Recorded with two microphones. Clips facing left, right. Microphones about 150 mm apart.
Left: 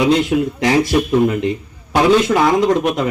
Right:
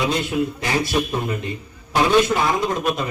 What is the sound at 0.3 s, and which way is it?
Speech, 85° left.